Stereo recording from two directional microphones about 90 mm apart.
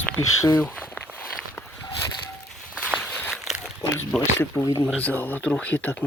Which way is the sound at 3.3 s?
5° right (ahead or behind).